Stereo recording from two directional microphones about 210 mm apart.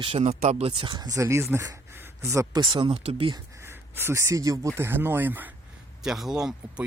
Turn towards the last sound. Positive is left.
turn(degrees=0)  # may be behind; listen again after turning